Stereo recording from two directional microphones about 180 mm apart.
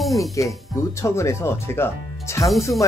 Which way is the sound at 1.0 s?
15° left (ahead or behind).